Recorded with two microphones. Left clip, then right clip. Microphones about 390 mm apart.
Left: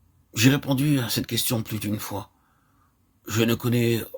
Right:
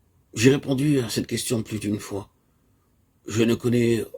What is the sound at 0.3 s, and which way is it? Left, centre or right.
Speech, left.